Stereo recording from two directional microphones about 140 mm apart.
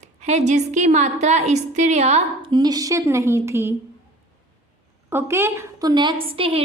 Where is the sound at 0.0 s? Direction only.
50° right (ahead or behind).